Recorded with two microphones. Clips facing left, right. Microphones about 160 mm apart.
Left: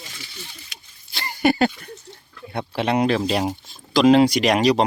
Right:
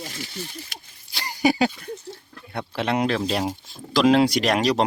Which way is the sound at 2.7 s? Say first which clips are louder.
Left 3 dB; 5° left (ahead or behind).